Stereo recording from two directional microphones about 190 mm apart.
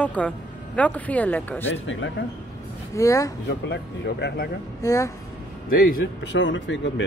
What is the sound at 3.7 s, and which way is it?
Speech, 65° left (ahead or behind).